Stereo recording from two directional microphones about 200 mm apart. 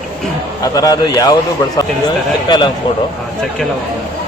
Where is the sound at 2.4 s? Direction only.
20° left (ahead or behind).